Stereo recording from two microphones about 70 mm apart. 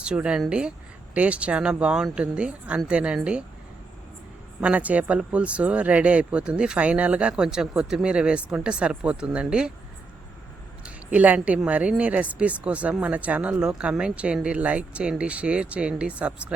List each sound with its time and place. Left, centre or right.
0.0 s speech: centre
4.6 s speech: right
10.8 s a woman's voice: right